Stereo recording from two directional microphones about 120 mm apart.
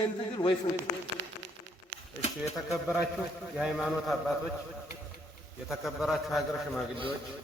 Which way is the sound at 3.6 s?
5° right (ahead or behind).